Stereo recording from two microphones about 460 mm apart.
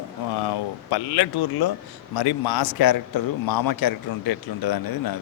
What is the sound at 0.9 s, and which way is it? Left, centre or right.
A man's voice, left.